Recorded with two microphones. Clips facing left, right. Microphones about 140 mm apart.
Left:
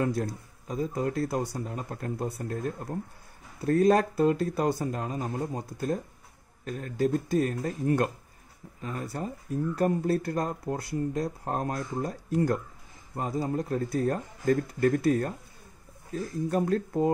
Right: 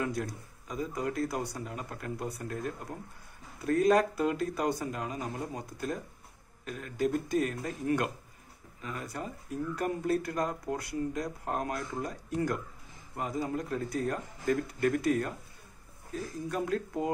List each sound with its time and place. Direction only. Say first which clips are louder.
0.0 s speech: left 5 dB; 35° left (ahead or behind)
3.6 s speech: left 3 dB; 35° left (ahead or behind)
13.1 s speech: left 3 dB; 30° left (ahead or behind)
16.4 s speech: left 6 dB; 35° left (ahead or behind)